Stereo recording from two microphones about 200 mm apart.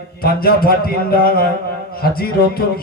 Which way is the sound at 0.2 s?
50° left (ahead or behind).